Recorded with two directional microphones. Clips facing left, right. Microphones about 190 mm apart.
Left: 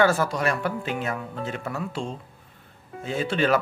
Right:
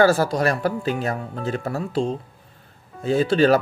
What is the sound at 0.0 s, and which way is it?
Speech, 35° right (ahead or behind).